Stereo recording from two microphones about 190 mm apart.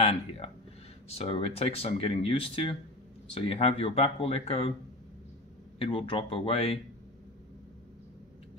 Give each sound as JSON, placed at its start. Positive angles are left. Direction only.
{"t": 0.0, "sound": "speech", "side_deg": 30}
{"t": 5.8, "sound": "speech", "side_deg": 30}